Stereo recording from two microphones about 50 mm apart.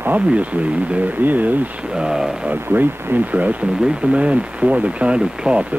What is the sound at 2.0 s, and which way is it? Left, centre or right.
Speech, centre.